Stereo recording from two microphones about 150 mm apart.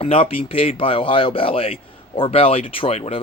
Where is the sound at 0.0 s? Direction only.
40° left (ahead or behind).